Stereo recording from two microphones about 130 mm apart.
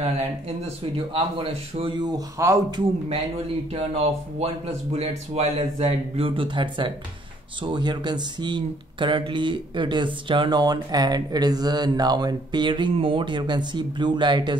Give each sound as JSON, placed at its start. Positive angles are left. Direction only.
{"t": 0.9, "sound": "speech", "side_deg": -45}
{"t": 3.7, "sound": "speech", "side_deg": -50}